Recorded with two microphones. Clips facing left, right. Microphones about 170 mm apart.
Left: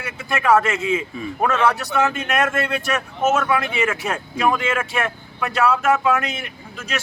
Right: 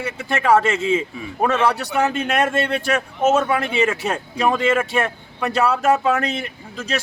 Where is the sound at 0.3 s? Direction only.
30° right (ahead or behind).